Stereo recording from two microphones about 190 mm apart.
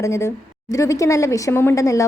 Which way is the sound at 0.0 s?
15° left (ahead or behind).